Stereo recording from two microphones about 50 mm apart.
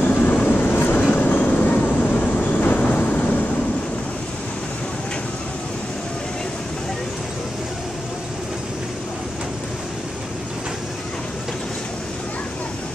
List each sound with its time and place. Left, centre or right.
0.0 s vehicle: left